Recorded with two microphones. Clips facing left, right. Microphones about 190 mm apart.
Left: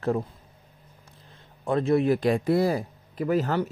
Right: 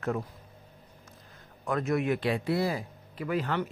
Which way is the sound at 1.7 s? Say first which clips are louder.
Left 6 dB; 30° left (ahead or behind).